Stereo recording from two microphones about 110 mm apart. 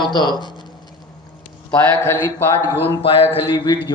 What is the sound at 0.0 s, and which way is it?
Speech, 40° left (ahead or behind).